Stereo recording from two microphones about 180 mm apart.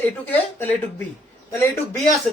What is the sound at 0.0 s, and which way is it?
A man's voice, 10° left (ahead or behind).